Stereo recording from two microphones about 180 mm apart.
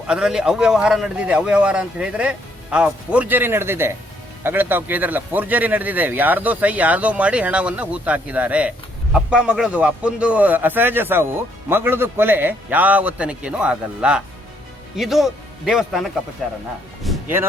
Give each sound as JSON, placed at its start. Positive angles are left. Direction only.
{"t": 0.1, "sound": "a man's voice", "side_deg": -5}
{"t": 17.1, "sound": "music", "side_deg": 0}